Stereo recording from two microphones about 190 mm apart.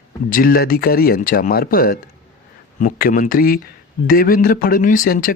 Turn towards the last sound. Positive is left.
turn(degrees=45)  # may be behind; listen again after turning